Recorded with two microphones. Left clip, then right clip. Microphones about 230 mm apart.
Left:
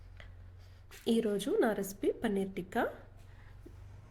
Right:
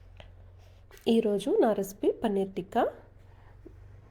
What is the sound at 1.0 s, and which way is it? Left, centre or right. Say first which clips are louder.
A woman's voice: right 6 dB; centre.